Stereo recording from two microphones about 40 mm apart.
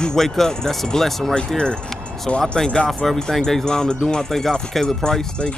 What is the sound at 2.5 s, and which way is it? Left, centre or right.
Speech, left.